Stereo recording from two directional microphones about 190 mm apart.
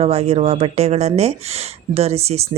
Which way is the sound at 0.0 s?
30° right (ahead or behind).